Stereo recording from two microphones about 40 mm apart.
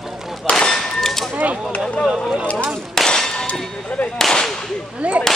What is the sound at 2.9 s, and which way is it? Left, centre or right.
Clang, centre.